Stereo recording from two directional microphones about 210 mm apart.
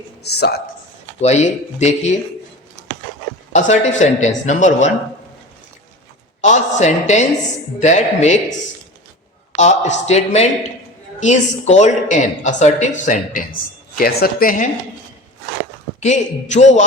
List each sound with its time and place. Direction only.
0.2 s speech: 50° left (ahead or behind)
1.2 s speech: 30° left (ahead or behind)
3.5 s speech: 35° left (ahead or behind)
6.4 s speech: 35° left (ahead or behind)
9.6 s speech: 35° left (ahead or behind)
16.0 s speech: 35° left (ahead or behind)